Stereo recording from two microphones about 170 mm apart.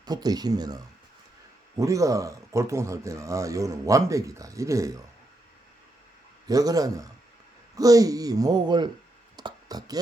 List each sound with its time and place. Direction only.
0.0 s speech: 25° right (ahead or behind)
6.5 s speech: 20° right (ahead or behind)
9.3 s a sound: 25° right (ahead or behind)